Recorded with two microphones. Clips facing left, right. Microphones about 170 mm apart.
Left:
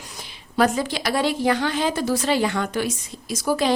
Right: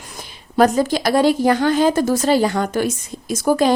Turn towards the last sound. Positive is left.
turn(degrees=-45)  # may be behind; listen again after turning